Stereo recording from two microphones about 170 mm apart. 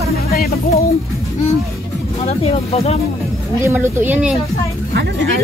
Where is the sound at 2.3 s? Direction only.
35° left (ahead or behind).